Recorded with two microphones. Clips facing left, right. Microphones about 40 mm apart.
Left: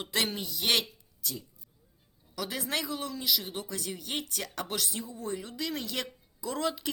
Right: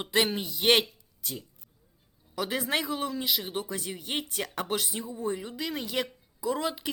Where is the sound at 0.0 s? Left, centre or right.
Centre.